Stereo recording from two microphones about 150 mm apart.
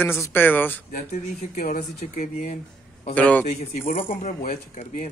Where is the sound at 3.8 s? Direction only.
65° left (ahead or behind).